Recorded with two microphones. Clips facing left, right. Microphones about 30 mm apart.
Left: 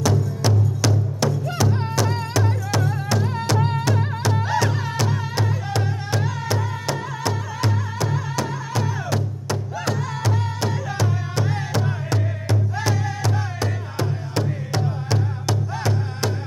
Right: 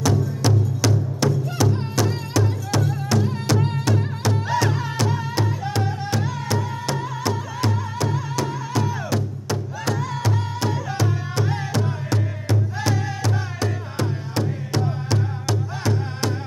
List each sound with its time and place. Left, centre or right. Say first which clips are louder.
0.0 s music: even; centre